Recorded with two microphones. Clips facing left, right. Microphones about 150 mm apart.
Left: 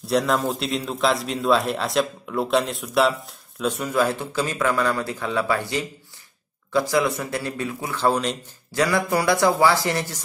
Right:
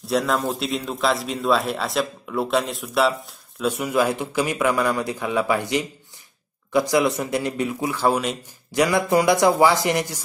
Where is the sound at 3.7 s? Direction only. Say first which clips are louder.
Right 1 dB; 10° right (ahead or behind).